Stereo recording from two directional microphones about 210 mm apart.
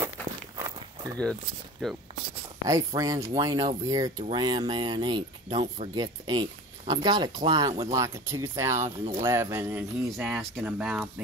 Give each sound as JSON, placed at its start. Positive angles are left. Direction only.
{"t": 0.6, "sound": "walk", "side_deg": -15}
{"t": 1.8, "sound": "speech", "side_deg": 0}
{"t": 2.6, "sound": "speech", "side_deg": -15}